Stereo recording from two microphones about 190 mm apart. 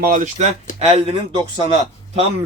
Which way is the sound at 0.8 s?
30° right (ahead or behind).